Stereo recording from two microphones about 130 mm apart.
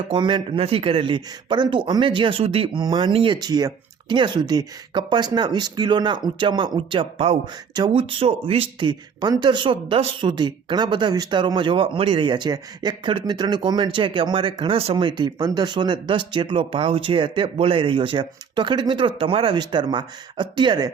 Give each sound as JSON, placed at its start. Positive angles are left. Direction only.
{"t": 0.1, "sound": "speech", "side_deg": -40}
{"t": 2.8, "sound": "speech", "side_deg": -35}